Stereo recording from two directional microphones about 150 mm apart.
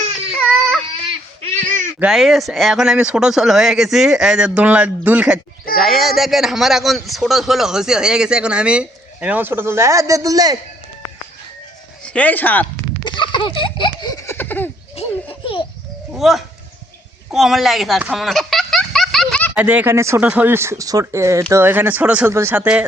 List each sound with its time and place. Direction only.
1.6 s cat: 55° right (ahead or behind)
2.0 s a man's voice: centre (ahead or behind); by 10.6 s 25° right (ahead or behind)
12.0 s speech: 10° left (ahead or behind)
13.1 s a sound: 30° left (ahead or behind); by 14.7 s 15° left (ahead or behind)
14.9 s children playing: 35° left (ahead or behind)
16.1 s a man's voice: centre (ahead or behind)
18.1 s a sound: centre (ahead or behind)
19.5 s speech: 10° right (ahead or behind)